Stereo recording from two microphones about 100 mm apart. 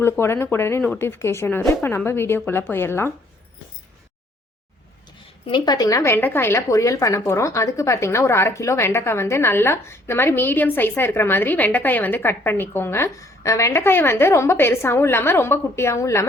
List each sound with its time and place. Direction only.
0.0 s speech: 25° left (ahead or behind)
5.5 s speech: 50° left (ahead or behind); by 16.2 s 30° left (ahead or behind)